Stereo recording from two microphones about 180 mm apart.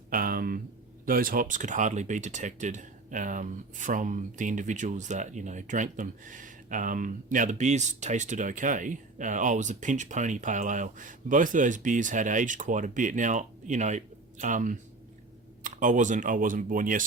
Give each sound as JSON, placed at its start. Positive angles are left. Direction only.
{"t": 0.1, "sound": "speech", "side_deg": -55}